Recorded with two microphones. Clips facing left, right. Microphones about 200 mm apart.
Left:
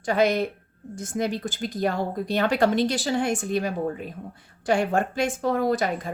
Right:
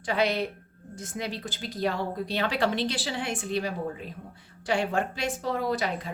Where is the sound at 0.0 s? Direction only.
45° left (ahead or behind).